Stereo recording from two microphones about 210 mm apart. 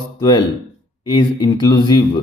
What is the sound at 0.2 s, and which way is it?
Speech, 20° left (ahead or behind).